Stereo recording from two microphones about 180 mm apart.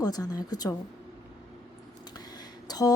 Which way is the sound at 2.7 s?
20° left (ahead or behind).